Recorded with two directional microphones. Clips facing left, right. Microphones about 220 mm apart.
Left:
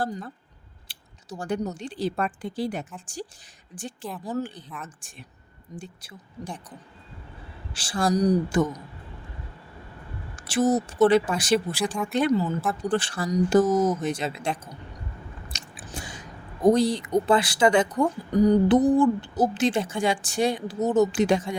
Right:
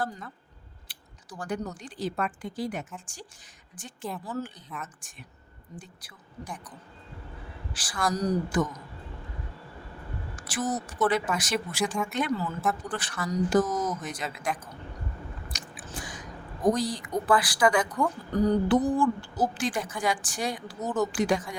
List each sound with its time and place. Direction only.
0.9 s speech: 25° left (ahead or behind)
4.2 s a woman's voice: 15° left (ahead or behind)
4.7 s a woman's voice: centre (ahead or behind)
5.8 s a woman's voice: 25° left (ahead or behind)
8.1 s a woman's voice: 15° left (ahead or behind)
8.4 s a woman's voice: 25° left (ahead or behind)
10.3 s a woman's voice: 25° left (ahead or behind)
12.3 s a woman's voice: 20° left (ahead or behind)
15.7 s chewing: 25° left (ahead or behind)
16.6 s a woman's voice: 25° left (ahead or behind)